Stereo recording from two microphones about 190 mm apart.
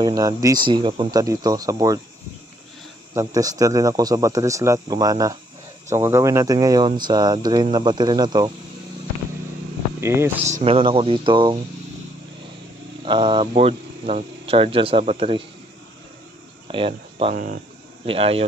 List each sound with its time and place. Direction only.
0.0 s speech: 20° right (ahead or behind)
3.2 s speech: 20° right (ahead or behind)
9.9 s speech: 15° right (ahead or behind)
10.4 s speech: 35° right (ahead or behind)
13.0 s speech: 25° right (ahead or behind)
16.6 s speech: 30° right (ahead or behind)